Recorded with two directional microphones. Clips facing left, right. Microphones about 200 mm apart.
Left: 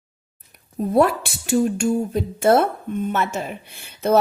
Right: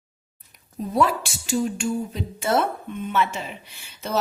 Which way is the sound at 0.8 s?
50° left (ahead or behind).